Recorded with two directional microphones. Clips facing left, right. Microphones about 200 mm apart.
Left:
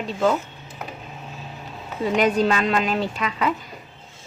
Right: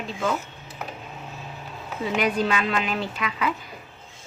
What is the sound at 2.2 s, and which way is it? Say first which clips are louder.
A woman's voice: left 4 dB; 40° left (ahead or behind).